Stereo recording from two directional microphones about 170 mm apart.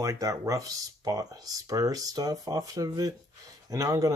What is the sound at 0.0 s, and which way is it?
Speech, 20° right (ahead or behind).